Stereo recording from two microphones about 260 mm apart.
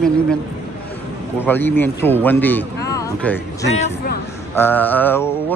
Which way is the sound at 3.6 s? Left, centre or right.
Left.